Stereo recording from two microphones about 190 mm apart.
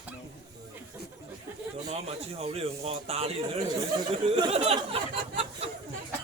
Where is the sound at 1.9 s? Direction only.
35° right (ahead or behind).